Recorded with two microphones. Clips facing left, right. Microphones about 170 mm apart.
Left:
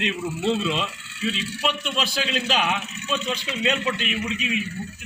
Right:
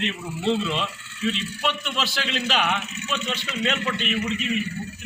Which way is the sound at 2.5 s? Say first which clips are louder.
Right 1 dB; 10° left (ahead or behind).